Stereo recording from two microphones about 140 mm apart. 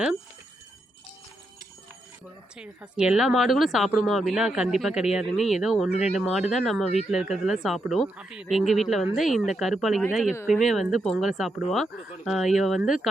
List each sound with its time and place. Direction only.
2.6 s a woman's voice: 5° right (ahead or behind)
5.9 s speech: 50° left (ahead or behind)
6.1 s a woman's voice: centre (ahead or behind)